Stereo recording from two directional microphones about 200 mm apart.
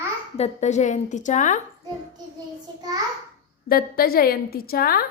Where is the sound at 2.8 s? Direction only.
20° right (ahead or behind).